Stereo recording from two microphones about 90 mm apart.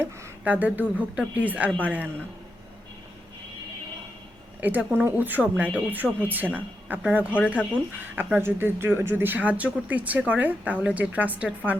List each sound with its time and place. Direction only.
0.4 s speech: 15° right (ahead or behind)
4.6 s speech: 15° right (ahead or behind)